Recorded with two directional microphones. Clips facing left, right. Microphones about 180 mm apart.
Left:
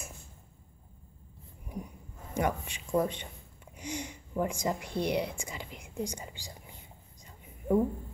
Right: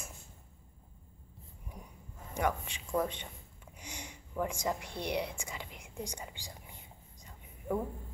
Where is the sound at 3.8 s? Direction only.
55° left (ahead or behind).